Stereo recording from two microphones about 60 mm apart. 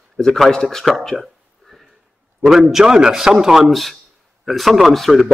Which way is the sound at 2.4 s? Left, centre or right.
Centre.